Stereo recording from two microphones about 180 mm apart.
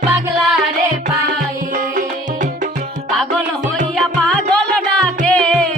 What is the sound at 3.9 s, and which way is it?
Music, 5° left (ahead or behind).